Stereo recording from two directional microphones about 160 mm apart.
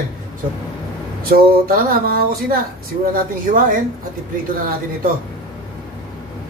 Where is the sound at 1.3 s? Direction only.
65° right (ahead or behind).